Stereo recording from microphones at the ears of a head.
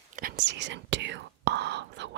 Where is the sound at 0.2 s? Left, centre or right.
Right.